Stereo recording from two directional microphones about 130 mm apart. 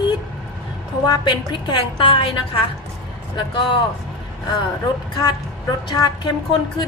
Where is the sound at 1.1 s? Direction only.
35° left (ahead or behind).